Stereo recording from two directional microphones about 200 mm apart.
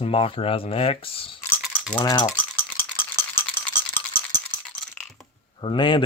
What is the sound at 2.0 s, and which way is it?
Speech, 20° left (ahead or behind).